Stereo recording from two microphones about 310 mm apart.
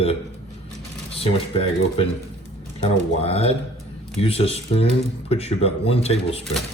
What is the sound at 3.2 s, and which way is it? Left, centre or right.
Speech, centre.